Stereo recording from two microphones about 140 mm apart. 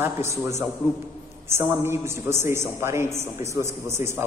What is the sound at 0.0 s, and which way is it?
A man's voice, 20° right (ahead or behind).